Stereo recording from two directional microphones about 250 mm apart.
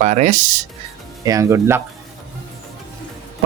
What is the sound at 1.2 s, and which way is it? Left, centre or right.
Speech, centre.